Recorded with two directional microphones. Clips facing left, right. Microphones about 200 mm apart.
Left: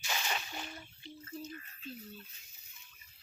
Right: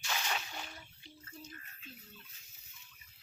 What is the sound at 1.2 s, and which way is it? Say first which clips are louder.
Speech: left 8 dB; 30° left (ahead or behind).